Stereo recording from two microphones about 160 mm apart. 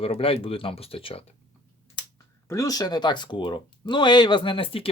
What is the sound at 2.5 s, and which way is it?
Speech, 20° left (ahead or behind).